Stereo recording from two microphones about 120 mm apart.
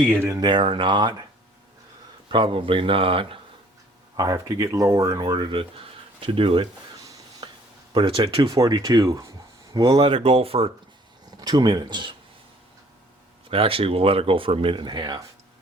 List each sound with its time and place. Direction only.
0.0 s speech: 15° right (ahead or behind)
0.3 s speech: 40° right (ahead or behind)
2.3 s speech: 45° right (ahead or behind)
4.2 s speech: 30° right (ahead or behind)
6.1 s speech: 50° right (ahead or behind)
7.4 s a sound: 40° right (ahead or behind)
7.9 s speech: 45° right (ahead or behind); by 10.0 s 30° right (ahead or behind)
10.0 s speech: 50° right (ahead or behind)
11.3 s speech: 35° right (ahead or behind)
13.5 s speech: 50° right (ahead or behind)